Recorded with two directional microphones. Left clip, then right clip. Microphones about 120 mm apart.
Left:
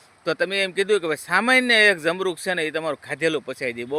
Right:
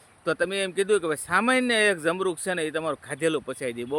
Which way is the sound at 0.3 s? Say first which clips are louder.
Left 3 dB; 5° left (ahead or behind).